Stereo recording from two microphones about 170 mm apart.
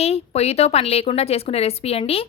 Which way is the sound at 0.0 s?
40° left (ahead or behind).